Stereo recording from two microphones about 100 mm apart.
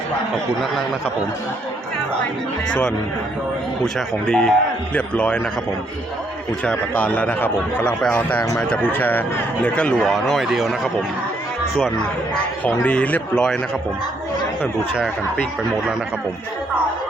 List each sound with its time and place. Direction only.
2.6 s a man's voice: 10° left (ahead or behind)
3.9 s a man's voice: 5° left (ahead or behind)
6.7 s a man's voice: 15° left (ahead or behind); by 10.8 s 5° right (ahead or behind)
12.8 s a man's voice: 15° left (ahead or behind)